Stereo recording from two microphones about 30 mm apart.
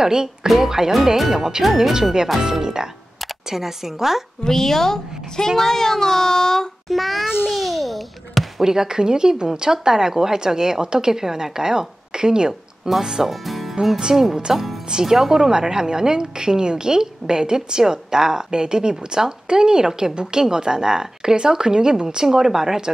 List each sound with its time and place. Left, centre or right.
0.0 s a woman's voice: right
4.5 s speech: centre
6.9 s a child's voice: centre
7.5 s babbling: centre
8.5 s a woman's voice: centre
13.3 s music: centre
14.1 s a child's voice: centre
14.9 s a woman's voice: centre